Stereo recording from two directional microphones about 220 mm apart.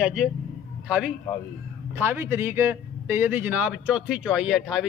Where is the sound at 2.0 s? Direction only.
10° right (ahead or behind).